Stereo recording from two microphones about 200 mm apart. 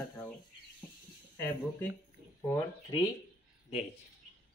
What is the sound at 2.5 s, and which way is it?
Speech, 20° left (ahead or behind).